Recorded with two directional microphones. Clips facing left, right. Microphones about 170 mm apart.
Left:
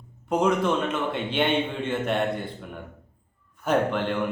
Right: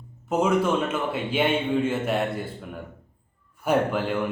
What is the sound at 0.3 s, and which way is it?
A man's voice, 5° right (ahead or behind).